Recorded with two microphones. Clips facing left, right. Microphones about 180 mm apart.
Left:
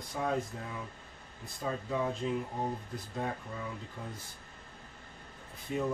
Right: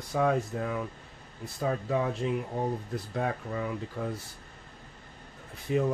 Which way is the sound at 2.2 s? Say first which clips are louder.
Right 4 dB; 65° right (ahead or behind).